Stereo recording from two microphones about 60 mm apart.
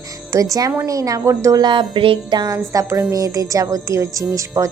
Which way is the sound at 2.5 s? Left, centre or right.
Right.